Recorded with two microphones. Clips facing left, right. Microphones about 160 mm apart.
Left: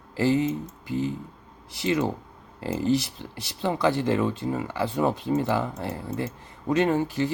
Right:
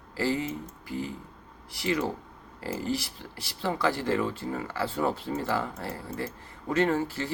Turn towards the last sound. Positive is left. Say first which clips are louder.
# left 3 dB
turn(degrees=20)  # may be behind; listen again after turning